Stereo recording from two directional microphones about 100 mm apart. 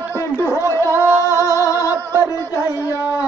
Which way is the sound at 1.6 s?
35° left (ahead or behind).